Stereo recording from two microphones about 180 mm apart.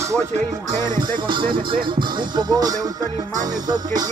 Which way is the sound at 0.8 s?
25° right (ahead or behind).